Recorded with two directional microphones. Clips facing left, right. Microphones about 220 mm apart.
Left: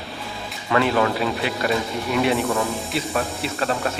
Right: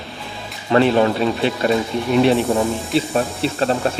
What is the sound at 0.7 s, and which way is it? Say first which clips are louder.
Speech: right 5 dB; 30° right (ahead or behind).